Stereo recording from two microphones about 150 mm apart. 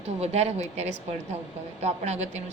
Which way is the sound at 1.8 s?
50° right (ahead or behind).